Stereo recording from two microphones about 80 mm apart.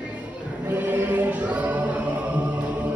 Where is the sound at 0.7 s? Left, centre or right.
Centre.